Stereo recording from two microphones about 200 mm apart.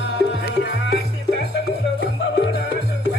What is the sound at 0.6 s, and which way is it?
Music, 50° left (ahead or behind).